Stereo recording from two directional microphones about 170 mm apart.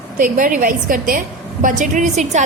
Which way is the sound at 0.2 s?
50° right (ahead or behind).